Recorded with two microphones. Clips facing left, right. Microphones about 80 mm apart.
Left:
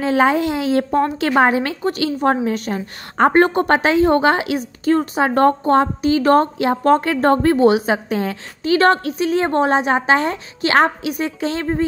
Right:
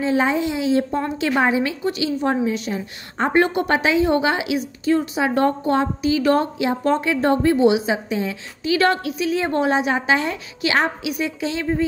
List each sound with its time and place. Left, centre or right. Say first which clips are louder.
0.0 s a child's voice: left 4 dB; left
8.7 s a woman's voice: left 4 dB; left